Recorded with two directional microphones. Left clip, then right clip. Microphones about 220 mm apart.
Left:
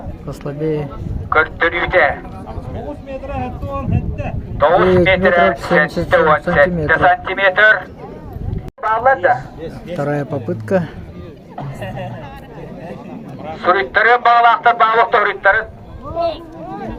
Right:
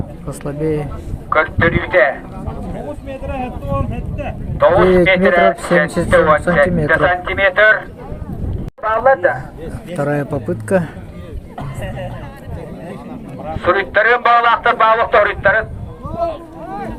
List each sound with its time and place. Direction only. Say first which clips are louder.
0.3 s speech: right 1 dB; centre (ahead or behind)
1.3 s a man's voice: even; 30° left (ahead or behind)
3.1 s speech: even; 5° left (ahead or behind)
4.6 s a man's voice: right 1 dB; 30° left (ahead or behind)
9.9 s speech: right 1 dB; 5° right (ahead or behind)
11.8 s speech: even; 35° left (ahead or behind)
13.4 s a man's voice: left 1 dB; 25° left (ahead or behind)